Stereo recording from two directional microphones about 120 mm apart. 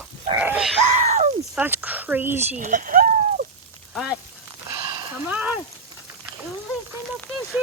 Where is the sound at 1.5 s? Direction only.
15° right (ahead or behind).